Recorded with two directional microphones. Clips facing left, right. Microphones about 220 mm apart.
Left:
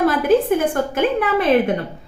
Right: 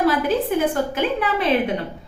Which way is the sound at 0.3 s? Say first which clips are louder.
Left 4 dB; 50° left (ahead or behind).